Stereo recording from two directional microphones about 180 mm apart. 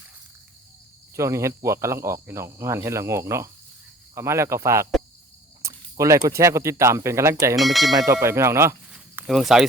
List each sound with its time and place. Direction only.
1.1 s speech: 15° right (ahead or behind)
7.5 s speech: centre (ahead or behind)
7.9 s speech: 15° right (ahead or behind)